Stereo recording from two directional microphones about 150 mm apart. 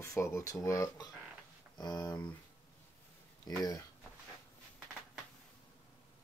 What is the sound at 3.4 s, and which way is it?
Speech, 25° left (ahead or behind).